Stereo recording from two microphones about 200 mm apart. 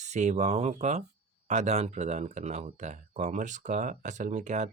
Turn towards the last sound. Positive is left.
turn(degrees=-35)  # may be behind; listen again after turning